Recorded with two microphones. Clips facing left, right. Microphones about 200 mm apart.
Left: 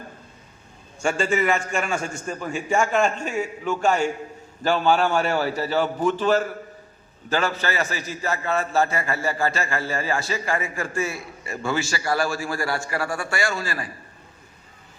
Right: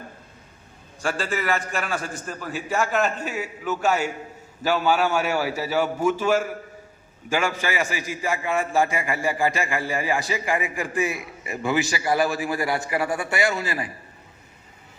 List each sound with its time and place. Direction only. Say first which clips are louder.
1.0 s a man's voice: left 4 dB; centre (ahead or behind); by 13.9 s 20° right (ahead or behind)